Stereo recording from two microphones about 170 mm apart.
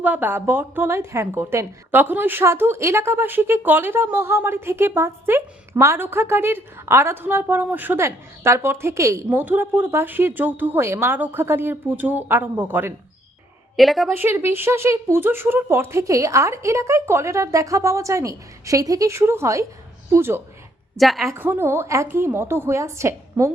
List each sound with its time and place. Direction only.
0.0 s a woman's voice: 10° right (ahead or behind)
13.7 s a woman's voice: centre (ahead or behind)
14.2 s a woman's voice: 15° right (ahead or behind)
21.0 s a woman's voice: centre (ahead or behind)
21.3 s a woman's voice: 10° right (ahead or behind)